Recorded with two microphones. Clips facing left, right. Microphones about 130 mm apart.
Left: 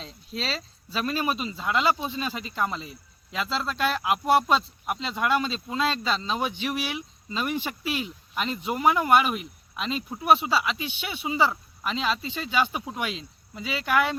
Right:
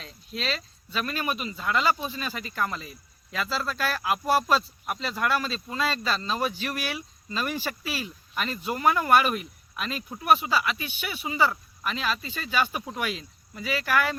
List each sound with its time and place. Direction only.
0.0 s speech: 30° left (ahead or behind)